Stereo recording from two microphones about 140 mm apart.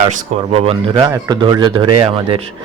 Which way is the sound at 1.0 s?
30° right (ahead or behind).